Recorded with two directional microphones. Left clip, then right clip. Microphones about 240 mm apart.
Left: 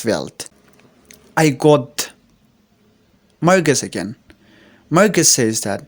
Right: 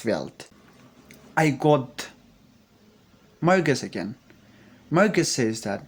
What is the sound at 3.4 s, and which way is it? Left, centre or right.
Speech, left.